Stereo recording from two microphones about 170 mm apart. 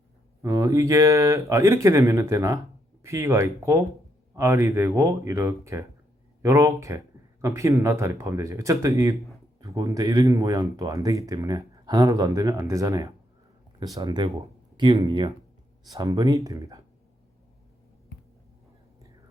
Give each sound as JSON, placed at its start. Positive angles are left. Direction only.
{"t": 0.4, "sound": "speech", "side_deg": -20}